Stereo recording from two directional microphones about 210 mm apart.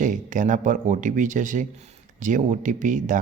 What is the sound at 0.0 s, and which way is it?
Speech, 40° right (ahead or behind).